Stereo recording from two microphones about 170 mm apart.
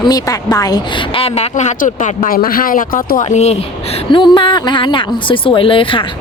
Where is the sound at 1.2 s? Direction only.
40° left (ahead or behind).